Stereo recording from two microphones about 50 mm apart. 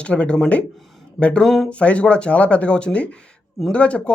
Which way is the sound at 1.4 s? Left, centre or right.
Centre.